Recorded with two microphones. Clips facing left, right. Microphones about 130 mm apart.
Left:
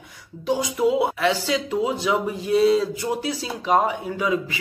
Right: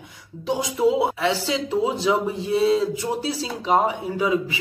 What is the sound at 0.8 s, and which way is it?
A man's voice, 25° right (ahead or behind).